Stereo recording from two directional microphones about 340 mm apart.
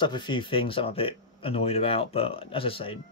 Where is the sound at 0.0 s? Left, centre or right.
Centre.